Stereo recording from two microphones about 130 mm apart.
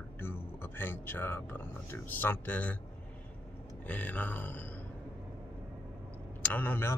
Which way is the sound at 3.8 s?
10° left (ahead or behind).